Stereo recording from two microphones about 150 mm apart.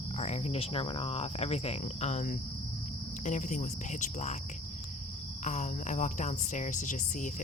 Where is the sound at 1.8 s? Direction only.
50° left (ahead or behind).